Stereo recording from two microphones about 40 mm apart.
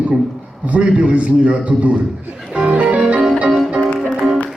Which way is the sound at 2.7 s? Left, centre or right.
Right.